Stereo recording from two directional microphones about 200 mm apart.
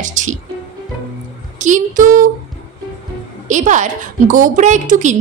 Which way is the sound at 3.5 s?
40° right (ahead or behind).